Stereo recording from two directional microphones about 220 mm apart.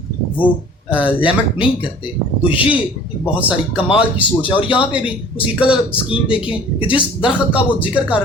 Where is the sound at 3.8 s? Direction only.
5° right (ahead or behind).